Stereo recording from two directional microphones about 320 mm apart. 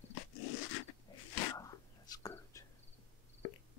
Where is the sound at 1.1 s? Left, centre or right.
Centre.